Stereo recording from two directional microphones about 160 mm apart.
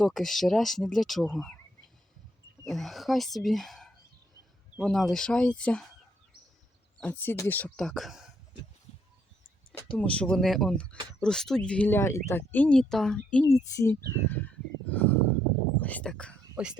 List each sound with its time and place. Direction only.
0.0 s speech: centre (ahead or behind)
2.6 s speech: centre (ahead or behind)
7.0 s speech: 10° left (ahead or behind)
9.9 s speech: 5° left (ahead or behind)
13.5 s speech: 15° left (ahead or behind)
14.3 s a sound: 10° left (ahead or behind)
15.8 s speech: 10° left (ahead or behind)